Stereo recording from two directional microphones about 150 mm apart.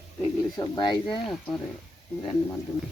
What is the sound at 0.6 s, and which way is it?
Speech, 30° left (ahead or behind).